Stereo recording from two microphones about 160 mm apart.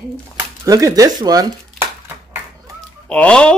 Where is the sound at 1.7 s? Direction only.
10° right (ahead or behind).